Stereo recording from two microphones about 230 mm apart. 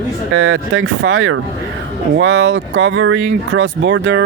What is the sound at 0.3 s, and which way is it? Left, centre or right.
Speech, right.